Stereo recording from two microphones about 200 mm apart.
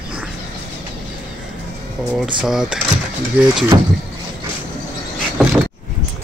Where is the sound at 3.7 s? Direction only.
20° right (ahead or behind).